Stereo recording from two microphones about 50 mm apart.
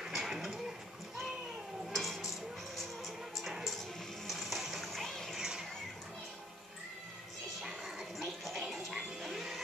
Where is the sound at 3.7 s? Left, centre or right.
Centre.